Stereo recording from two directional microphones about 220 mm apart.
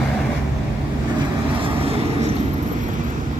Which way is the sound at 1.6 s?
25° right (ahead or behind).